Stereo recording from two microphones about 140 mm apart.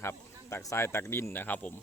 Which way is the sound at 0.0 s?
20° left (ahead or behind).